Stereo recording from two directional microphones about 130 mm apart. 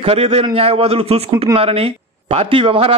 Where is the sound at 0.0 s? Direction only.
50° right (ahead or behind).